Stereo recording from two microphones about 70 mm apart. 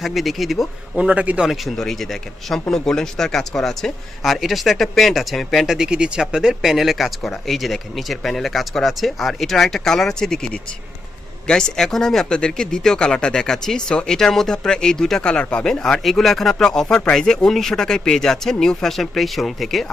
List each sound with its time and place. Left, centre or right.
0.0 s speech: centre
0.9 s a man's voice: centre
1.4 s speech: centre
5.7 s speech: centre